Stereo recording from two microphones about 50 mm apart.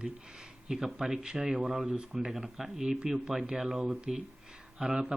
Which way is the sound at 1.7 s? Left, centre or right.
Centre.